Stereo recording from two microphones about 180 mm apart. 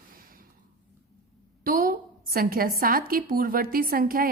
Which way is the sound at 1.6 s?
50° right (ahead or behind).